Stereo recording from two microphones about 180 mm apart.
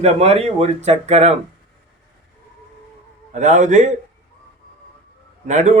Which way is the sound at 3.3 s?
40° right (ahead or behind).